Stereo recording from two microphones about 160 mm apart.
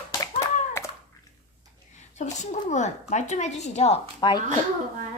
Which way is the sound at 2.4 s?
45° left (ahead or behind).